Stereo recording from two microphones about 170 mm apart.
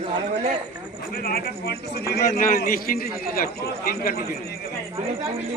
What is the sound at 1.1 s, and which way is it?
A man's voice, 60° left (ahead or behind).